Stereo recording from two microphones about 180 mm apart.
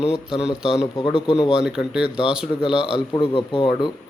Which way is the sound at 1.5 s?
5° right (ahead or behind).